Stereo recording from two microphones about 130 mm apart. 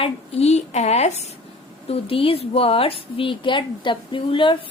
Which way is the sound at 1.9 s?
45° left (ahead or behind).